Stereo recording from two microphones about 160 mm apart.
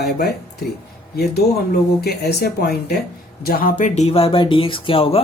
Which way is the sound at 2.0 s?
90° left.